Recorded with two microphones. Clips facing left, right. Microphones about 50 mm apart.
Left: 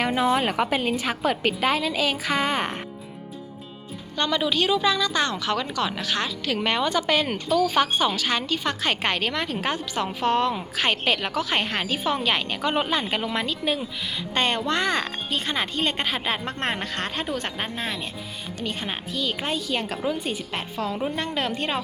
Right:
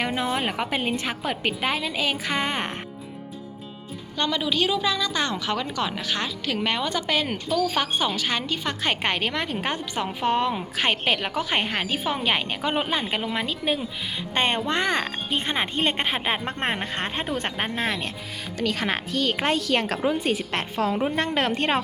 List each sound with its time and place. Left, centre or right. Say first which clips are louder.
0.0 s a woman's voice: left 4 dB; centre
4.2 s a woman's voice: left 1 dB; centre; by 17.3 s right
17.3 s speech: right 2 dB; right
18.6 s speech: right 5 dB; right
21.3 s a woman's voice: right 3 dB; right